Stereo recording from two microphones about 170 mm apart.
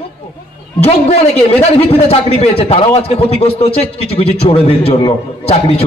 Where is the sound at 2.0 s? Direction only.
35° left (ahead or behind).